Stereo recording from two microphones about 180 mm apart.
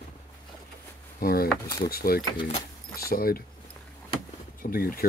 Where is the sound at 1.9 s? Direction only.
55° left (ahead or behind).